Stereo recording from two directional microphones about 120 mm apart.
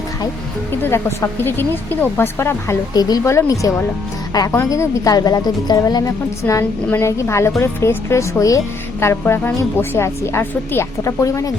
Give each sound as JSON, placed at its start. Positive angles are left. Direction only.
{"t": 0.8, "sound": "speech", "side_deg": 20}
{"t": 2.9, "sound": "a woman's voice", "side_deg": 30}